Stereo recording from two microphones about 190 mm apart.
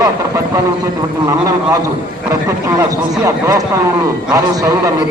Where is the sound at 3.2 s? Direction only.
15° right (ahead or behind).